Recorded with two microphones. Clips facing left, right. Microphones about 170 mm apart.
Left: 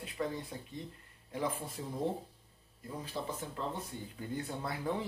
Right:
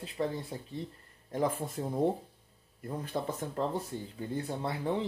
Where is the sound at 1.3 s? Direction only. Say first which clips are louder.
Right 5 dB; 45° right (ahead or behind).